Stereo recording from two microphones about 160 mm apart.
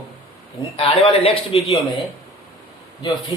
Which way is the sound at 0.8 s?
35° left (ahead or behind).